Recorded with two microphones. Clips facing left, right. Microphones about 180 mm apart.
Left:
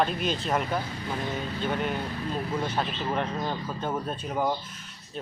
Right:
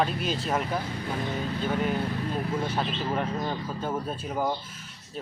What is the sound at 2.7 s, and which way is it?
Speech, centre (ahead or behind).